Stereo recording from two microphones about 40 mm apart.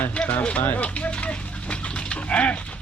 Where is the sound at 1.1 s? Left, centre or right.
Left.